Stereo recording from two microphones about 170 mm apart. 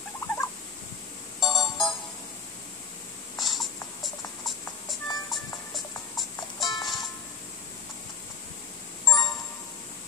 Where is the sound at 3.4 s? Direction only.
Centre (ahead or behind).